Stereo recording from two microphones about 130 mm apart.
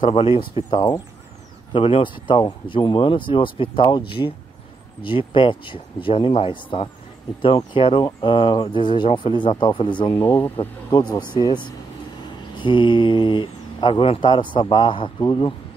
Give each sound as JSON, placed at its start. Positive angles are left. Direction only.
{"t": 0.0, "sound": "speech", "side_deg": 45}
{"t": 10.1, "sound": "speech", "side_deg": 20}
{"t": 10.9, "sound": "speech", "side_deg": 35}